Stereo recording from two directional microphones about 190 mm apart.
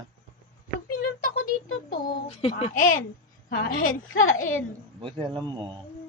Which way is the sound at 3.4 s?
50° left (ahead or behind).